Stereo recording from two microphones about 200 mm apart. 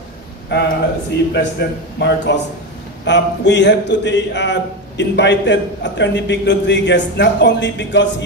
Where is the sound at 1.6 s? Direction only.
55° left (ahead or behind).